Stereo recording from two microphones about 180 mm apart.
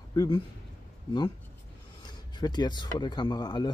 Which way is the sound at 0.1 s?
20° left (ahead or behind).